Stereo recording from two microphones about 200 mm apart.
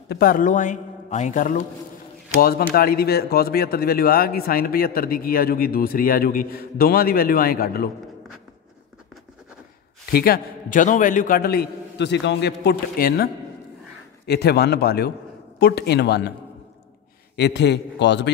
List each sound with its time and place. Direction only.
0.1 s a man's voice: 45° left (ahead or behind)
10.1 s a man's voice: 50° left (ahead or behind)
17.4 s a man's voice: 60° left (ahead or behind)